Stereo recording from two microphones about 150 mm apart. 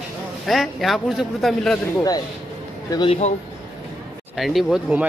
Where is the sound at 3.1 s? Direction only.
50° left (ahead or behind).